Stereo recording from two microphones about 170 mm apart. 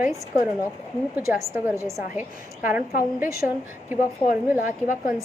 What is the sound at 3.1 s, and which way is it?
Speech, 20° right (ahead or behind).